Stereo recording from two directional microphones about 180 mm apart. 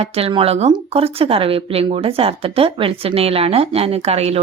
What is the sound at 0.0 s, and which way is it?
Speech, 30° right (ahead or behind).